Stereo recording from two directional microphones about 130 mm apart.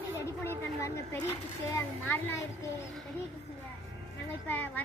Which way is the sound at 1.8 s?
20° left (ahead or behind).